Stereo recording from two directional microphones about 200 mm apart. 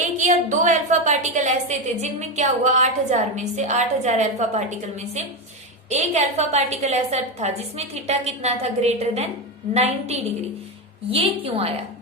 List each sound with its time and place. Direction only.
0.0 s a woman's voice: 35° right (ahead or behind)